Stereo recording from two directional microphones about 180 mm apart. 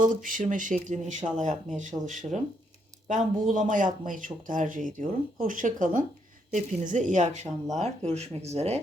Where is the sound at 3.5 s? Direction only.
45° right (ahead or behind).